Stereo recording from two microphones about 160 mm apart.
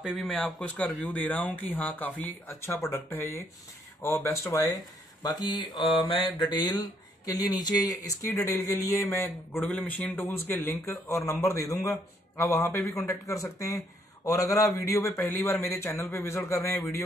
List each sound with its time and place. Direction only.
0.0 s speech: centre (ahead or behind); by 9.3 s 20° left (ahead or behind)
9.5 s speech: 5° left (ahead or behind)